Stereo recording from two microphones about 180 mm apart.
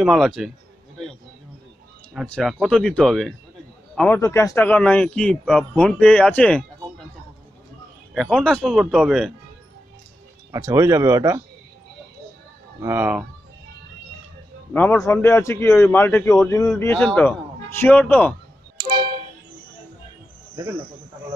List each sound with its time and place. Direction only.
0.0 s speech: centre (ahead or behind)
2.2 s a man's voice: 5° left (ahead or behind)
4.2 s a man's voice: 15° left (ahead or behind)
8.1 s speech: centre (ahead or behind)
10.5 s speech: 15° right (ahead or behind)
12.8 s speech: 10° right (ahead or behind)
14.7 s a man's voice: 10° left (ahead or behind)